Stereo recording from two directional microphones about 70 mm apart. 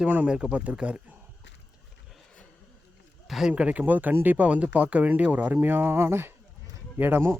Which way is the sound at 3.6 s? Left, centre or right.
Right.